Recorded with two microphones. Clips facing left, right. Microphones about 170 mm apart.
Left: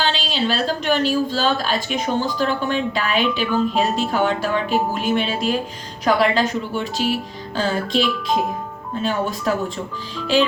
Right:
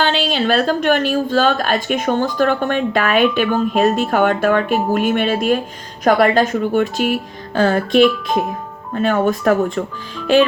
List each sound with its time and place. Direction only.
0.0 s a woman's voice: 55° right (ahead or behind)